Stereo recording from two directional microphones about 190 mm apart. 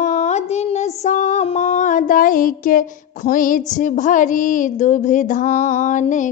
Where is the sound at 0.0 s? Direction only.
40° left (ahead or behind).